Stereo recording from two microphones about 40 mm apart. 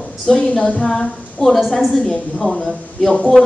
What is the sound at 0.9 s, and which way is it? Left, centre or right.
Speech, centre.